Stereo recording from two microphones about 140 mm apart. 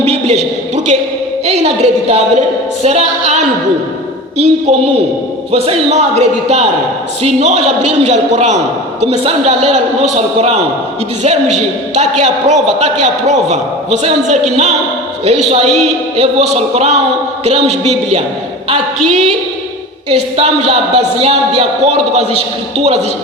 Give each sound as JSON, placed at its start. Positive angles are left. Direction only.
{"t": 0.0, "sound": "a sound", "side_deg": -50}
{"t": 1.5, "sound": "a man's voice", "side_deg": -50}
{"t": 5.5, "sound": "a man's voice", "side_deg": -45}